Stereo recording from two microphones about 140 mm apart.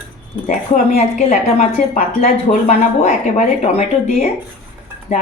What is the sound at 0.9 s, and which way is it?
A woman's voice, 50° left (ahead or behind).